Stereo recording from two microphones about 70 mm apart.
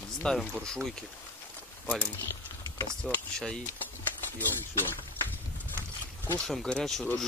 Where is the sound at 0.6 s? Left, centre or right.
Centre.